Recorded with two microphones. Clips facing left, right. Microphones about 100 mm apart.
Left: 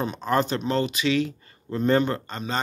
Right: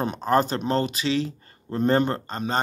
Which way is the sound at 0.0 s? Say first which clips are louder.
Right 2 dB; 45° right (ahead or behind).